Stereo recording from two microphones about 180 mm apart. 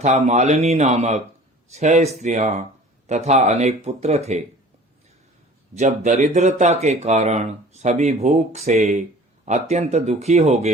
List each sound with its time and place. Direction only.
0.0 s speech: 40° right (ahead or behind)
5.7 s speech: 40° right (ahead or behind)